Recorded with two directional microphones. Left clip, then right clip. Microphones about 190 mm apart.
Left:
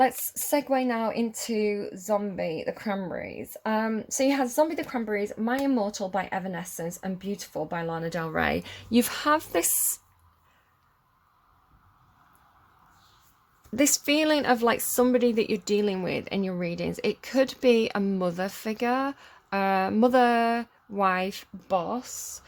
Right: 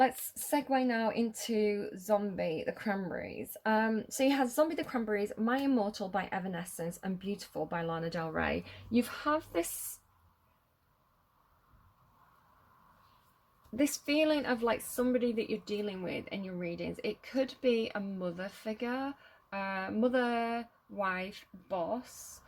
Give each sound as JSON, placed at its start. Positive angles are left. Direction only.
{"t": 0.5, "sound": "speech", "side_deg": 25}
{"t": 13.7, "sound": "a woman's voice", "side_deg": 45}